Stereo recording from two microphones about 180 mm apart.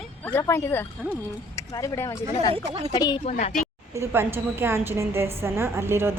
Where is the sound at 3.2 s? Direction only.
40° left (ahead or behind).